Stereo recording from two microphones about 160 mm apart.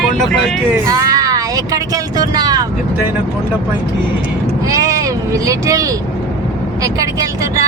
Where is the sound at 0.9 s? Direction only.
20° right (ahead or behind).